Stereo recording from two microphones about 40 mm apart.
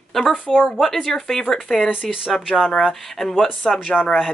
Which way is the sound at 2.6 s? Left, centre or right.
Centre.